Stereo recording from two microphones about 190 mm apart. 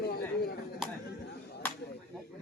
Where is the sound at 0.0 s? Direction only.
55° left (ahead or behind).